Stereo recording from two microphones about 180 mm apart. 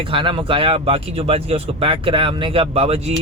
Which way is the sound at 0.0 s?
30° right (ahead or behind).